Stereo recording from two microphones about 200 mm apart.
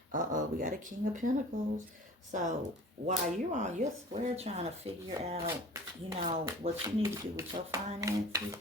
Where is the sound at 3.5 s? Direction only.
35° right (ahead or behind).